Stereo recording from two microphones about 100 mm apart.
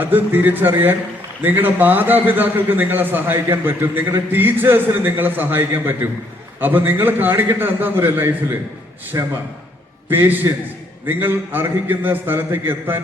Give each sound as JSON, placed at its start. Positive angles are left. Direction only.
{"t": 0.0, "sound": "a man's voice", "side_deg": -20}
{"t": 9.1, "sound": "a man's voice", "side_deg": -35}
{"t": 10.1, "sound": "a man's voice", "side_deg": -20}